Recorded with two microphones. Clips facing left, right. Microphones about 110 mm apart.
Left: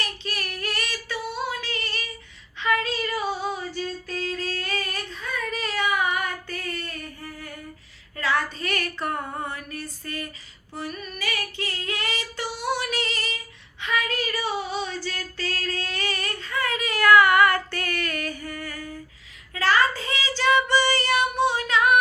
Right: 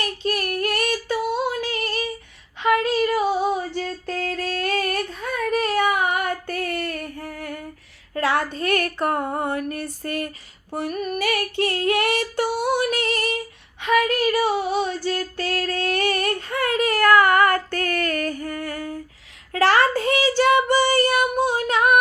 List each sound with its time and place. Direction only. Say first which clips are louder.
0.0 s female singing: right 8 dB; 45° right (ahead or behind)
2.6 s a sound: right 6 dB; 60° right (ahead or behind)
3.2 s female singing: right 7 dB; 10° right (ahead or behind)
3.8 s singing: right 3 dB; 65° right (ahead or behind)
8.1 s a sound: right 4 dB; 55° right (ahead or behind)
10.7 s female singing: right 8 dB; 55° right (ahead or behind)
19.5 s child singing: right 4 dB; 65° right (ahead or behind); by 21.9 s 45° right (ahead or behind)